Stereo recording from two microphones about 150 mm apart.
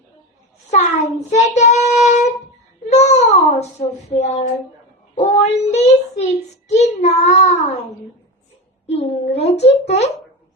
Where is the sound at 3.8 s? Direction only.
45° left (ahead or behind).